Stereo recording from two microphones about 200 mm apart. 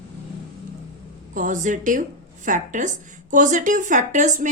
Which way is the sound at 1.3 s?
40° right (ahead or behind).